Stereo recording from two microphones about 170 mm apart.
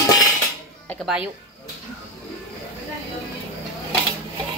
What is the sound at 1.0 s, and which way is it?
Speech, 5° right (ahead or behind).